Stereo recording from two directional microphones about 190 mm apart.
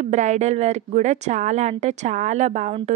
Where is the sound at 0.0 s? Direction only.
40° right (ahead or behind).